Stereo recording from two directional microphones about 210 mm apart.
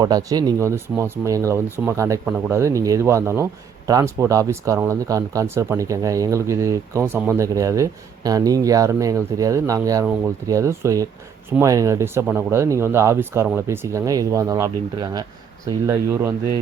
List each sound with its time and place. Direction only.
0.0 s speech: 15° right (ahead or behind)